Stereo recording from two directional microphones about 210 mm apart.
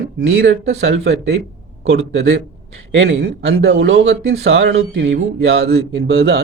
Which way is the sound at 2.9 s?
60° right (ahead or behind).